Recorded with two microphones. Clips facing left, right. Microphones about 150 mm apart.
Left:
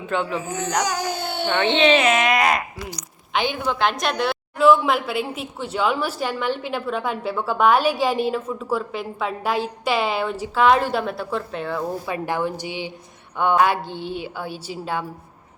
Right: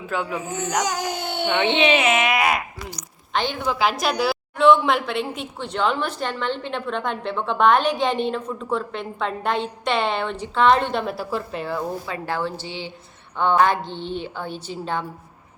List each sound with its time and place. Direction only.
0.1 s a woman's voice: 5° right (ahead or behind)
0.4 s baby cry: 20° right (ahead or behind)
1.5 s speech: 10° right (ahead or behind)
3.3 s a woman's voice: 5° left (ahead or behind)
12.0 s a woman's voice: 15° left (ahead or behind)